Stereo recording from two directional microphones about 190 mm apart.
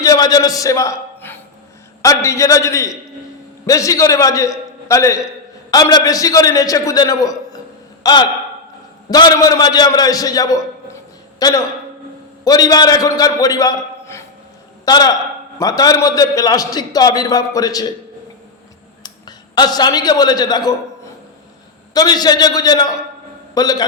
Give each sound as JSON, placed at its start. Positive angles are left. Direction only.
{"t": 0.0, "sound": "a man's voice", "side_deg": 20}
{"t": 19.0, "sound": "a man's voice", "side_deg": 20}
{"t": 21.9, "sound": "a man's voice", "side_deg": 20}